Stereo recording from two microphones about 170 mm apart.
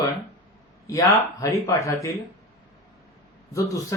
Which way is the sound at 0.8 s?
20° left (ahead or behind).